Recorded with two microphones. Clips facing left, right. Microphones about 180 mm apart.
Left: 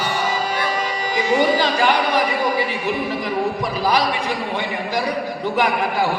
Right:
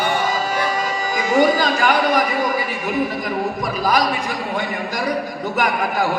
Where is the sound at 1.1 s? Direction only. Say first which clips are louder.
Right 1 dB; 45° right (ahead or behind).